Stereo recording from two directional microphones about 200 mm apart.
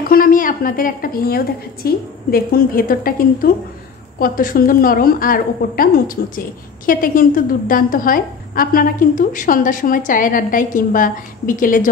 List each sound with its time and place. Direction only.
0.0 s a woman's voice: 45° left (ahead or behind)